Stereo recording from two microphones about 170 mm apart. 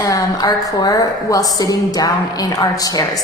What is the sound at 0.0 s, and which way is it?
A woman's voice, 20° left (ahead or behind).